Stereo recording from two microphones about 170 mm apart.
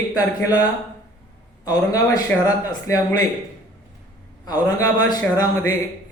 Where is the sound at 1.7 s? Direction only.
20° left (ahead or behind).